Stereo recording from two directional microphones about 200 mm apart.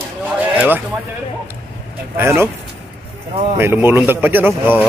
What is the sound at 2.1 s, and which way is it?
Speech, 10° right (ahead or behind).